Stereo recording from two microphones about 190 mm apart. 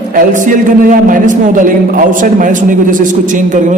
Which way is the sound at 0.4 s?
45° right (ahead or behind).